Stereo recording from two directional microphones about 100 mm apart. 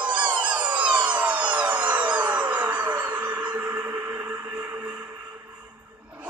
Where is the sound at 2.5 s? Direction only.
15° right (ahead or behind).